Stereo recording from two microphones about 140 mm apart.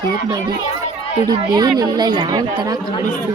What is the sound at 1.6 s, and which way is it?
Speech, 30° right (ahead or behind).